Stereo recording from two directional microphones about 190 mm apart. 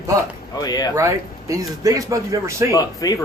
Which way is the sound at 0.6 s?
20° left (ahead or behind).